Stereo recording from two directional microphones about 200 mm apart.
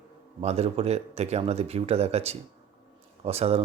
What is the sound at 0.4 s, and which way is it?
Speech, 30° right (ahead or behind).